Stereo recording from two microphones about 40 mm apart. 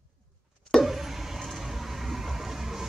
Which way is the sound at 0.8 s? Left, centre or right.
Centre.